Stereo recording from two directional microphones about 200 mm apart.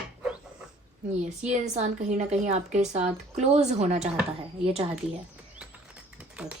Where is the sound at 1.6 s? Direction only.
35° right (ahead or behind).